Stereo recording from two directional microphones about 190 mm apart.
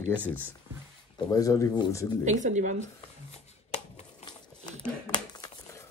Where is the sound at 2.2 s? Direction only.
40° right (ahead or behind).